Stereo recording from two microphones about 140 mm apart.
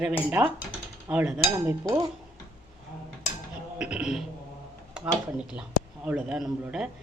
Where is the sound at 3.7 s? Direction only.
5° right (ahead or behind).